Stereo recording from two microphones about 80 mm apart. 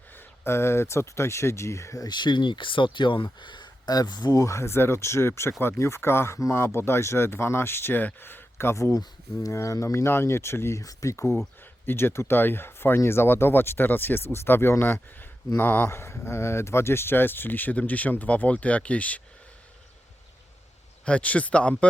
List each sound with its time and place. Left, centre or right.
0.2 s speech: left
2.0 s speech: left
3.4 s speech: left
15.9 s speech: left; by 19.2 s centre
21.0 s speech: centre